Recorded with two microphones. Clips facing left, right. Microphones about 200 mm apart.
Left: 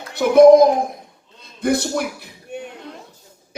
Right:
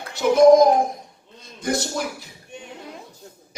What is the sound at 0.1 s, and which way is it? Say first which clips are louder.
Speech: left 4 dB; 60° left (ahead or behind).